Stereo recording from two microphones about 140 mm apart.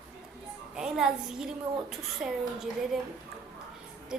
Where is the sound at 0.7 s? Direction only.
5° right (ahead or behind).